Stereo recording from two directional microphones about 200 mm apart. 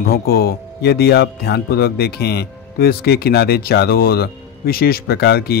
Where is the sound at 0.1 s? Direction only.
50° left (ahead or behind).